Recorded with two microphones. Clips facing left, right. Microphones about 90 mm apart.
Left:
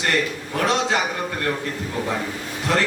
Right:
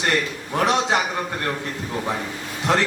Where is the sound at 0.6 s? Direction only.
20° right (ahead or behind).